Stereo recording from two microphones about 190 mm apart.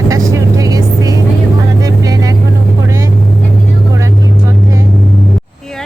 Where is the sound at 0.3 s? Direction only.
15° right (ahead or behind).